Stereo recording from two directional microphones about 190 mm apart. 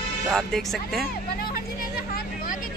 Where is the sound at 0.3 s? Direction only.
Centre (ahead or behind).